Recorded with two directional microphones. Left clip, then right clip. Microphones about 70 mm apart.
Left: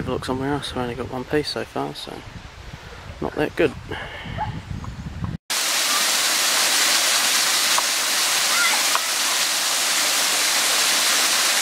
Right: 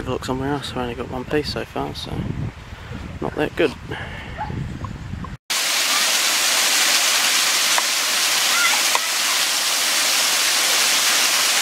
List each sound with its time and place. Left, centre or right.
0.0 s speech: centre
3.2 s speech: centre
5.5 s waterfall: centre